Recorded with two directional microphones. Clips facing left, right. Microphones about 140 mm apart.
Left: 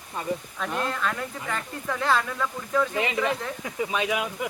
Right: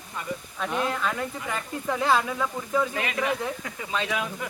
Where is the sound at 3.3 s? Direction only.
15° left (ahead or behind).